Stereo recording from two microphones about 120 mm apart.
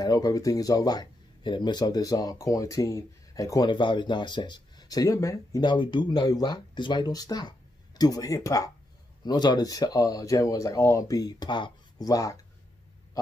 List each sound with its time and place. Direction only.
0.0 s speech: 30° left (ahead or behind)